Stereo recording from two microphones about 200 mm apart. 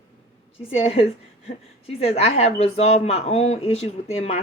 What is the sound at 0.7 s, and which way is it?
A woman's voice, 30° left (ahead or behind).